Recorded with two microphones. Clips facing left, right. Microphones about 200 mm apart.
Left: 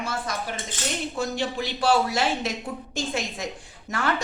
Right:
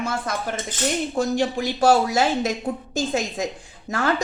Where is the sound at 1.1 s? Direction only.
45° right (ahead or behind).